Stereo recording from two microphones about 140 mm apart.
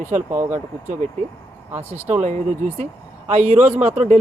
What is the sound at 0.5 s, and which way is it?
A man's voice, 60° right (ahead or behind).